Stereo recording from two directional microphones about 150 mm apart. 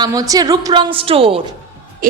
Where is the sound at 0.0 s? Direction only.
25° right (ahead or behind).